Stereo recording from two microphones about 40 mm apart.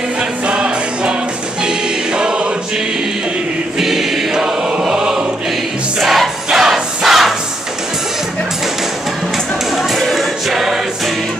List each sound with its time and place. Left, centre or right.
0.5 s music: right
2.1 s choir: right
3.8 s choir: centre
5.9 s crowd: centre
9.9 s choir: centre